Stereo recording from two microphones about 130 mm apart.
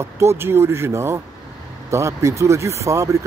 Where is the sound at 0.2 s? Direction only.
20° right (ahead or behind).